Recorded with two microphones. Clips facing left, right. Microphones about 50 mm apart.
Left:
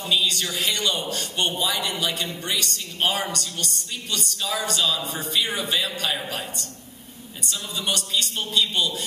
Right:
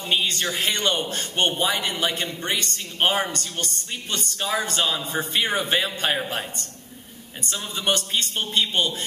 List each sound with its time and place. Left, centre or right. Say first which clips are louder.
0.0 s a man's voice: even; right
7.4 s a man's voice: right 3 dB; right